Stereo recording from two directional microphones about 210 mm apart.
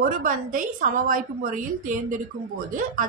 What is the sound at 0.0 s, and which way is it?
A woman's voice, 40° right (ahead or behind).